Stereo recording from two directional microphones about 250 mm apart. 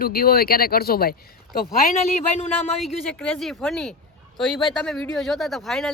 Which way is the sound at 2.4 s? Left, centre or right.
Left.